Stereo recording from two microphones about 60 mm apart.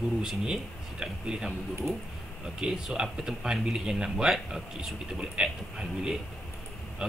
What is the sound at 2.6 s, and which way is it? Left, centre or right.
A man's voice, centre.